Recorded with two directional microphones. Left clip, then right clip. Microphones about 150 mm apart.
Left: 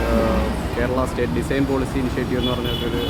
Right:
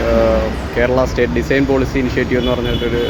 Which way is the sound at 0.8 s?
20° right (ahead or behind).